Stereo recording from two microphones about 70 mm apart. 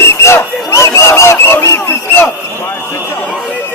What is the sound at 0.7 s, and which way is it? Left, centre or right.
Honk, left.